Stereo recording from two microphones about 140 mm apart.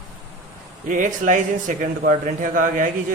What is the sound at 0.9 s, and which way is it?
A man's voice, 65° right (ahead or behind).